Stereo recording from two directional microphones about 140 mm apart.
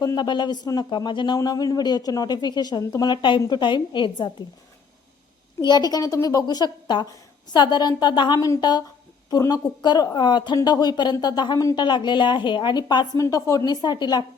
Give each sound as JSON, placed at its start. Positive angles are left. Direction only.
{"t": 0.0, "sound": "a woman's voice", "side_deg": 30}
{"t": 5.6, "sound": "a woman's voice", "side_deg": 30}